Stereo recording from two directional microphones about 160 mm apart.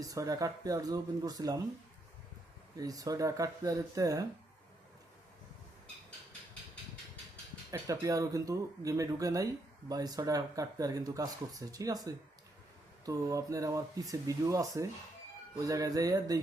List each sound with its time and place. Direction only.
0.0 s speech: 20° right (ahead or behind)
2.7 s speech: 20° right (ahead or behind)
7.7 s speech: 20° right (ahead or behind)